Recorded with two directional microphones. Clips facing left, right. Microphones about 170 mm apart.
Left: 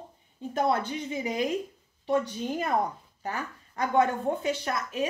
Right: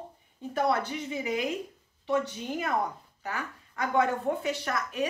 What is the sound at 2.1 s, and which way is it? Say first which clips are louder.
A woman's voice: left 2 dB; 35° left (ahead or behind).